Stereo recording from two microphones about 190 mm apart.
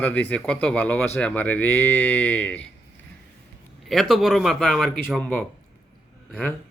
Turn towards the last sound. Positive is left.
turn(degrees=5)  # may be behind; listen again after turning